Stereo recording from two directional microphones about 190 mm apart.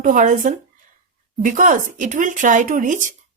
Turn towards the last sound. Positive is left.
turn(degrees=-45)  # may be behind; listen again after turning